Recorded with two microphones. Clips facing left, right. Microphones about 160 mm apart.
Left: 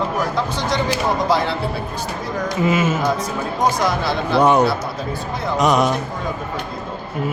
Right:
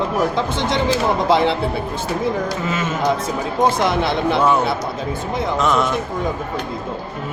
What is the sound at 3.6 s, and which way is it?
Speech, 25° right (ahead or behind).